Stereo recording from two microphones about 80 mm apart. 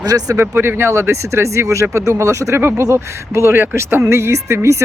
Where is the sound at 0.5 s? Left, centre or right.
Right.